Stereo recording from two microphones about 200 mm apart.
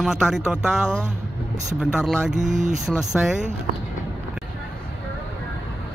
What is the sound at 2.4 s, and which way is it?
Speech, 35° right (ahead or behind).